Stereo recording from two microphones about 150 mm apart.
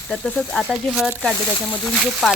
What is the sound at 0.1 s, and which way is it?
Speech, 5° left (ahead or behind).